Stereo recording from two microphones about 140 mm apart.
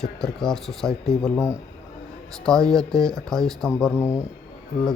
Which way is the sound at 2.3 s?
5° left (ahead or behind).